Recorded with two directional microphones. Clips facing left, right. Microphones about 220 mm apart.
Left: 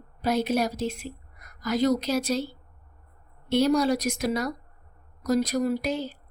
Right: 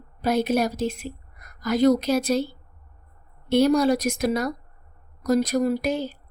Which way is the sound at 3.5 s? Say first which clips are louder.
Right 3 dB; 55° right (ahead or behind).